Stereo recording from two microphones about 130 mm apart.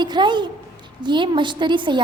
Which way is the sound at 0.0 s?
35° right (ahead or behind).